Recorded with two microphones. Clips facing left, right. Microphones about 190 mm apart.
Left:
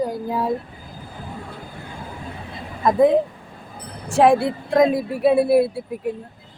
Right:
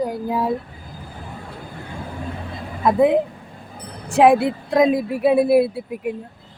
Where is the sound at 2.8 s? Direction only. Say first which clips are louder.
Even; 10° right (ahead or behind).